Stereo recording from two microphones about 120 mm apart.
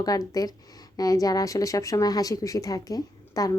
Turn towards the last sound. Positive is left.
turn(degrees=30)  # may be behind; listen again after turning